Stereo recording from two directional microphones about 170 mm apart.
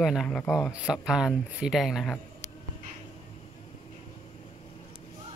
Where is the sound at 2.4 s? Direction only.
20° left (ahead or behind).